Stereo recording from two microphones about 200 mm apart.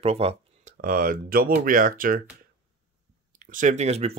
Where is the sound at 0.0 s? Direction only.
30° right (ahead or behind).